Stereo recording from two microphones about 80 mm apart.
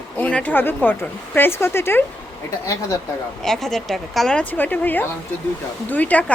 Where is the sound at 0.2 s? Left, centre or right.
Centre.